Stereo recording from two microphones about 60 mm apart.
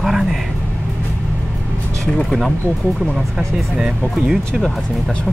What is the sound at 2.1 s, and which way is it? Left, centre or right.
Speech, centre.